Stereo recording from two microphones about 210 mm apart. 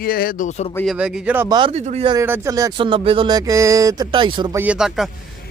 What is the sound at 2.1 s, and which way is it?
Speech, 15° right (ahead or behind).